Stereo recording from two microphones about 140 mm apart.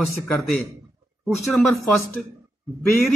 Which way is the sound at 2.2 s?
Centre (ahead or behind).